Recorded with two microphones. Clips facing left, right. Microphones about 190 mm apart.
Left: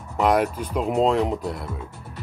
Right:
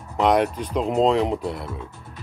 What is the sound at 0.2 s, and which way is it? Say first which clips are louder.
Speech: right 1 dB; 5° left (ahead or behind).